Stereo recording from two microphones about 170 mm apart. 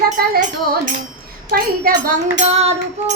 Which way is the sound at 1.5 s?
60° right (ahead or behind).